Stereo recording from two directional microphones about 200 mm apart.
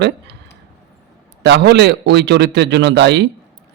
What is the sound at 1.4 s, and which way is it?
Speech, 60° right (ahead or behind).